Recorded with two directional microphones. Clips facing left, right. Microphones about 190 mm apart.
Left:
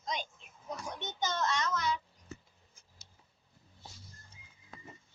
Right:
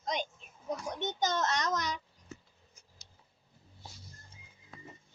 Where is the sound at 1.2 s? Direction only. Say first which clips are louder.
Right 1 dB; 45° right (ahead or behind).